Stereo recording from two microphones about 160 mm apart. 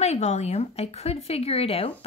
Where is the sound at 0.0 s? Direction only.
45° left (ahead or behind).